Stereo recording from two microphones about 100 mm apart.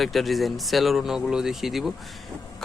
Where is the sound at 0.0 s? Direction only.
Centre (ahead or behind).